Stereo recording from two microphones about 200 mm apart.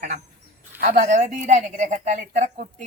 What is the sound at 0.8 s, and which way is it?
Speech, 35° right (ahead or behind).